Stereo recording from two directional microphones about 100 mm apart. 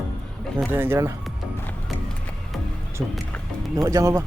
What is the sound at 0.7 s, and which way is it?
Speech, 20° right (ahead or behind).